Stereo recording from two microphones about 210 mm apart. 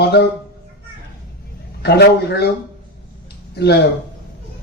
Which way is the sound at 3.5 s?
50° left (ahead or behind).